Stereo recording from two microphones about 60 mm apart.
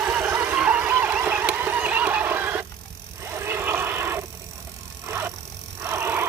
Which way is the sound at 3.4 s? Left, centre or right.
Right.